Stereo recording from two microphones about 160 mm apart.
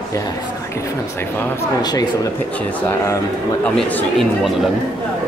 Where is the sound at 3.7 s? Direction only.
Centre (ahead or behind).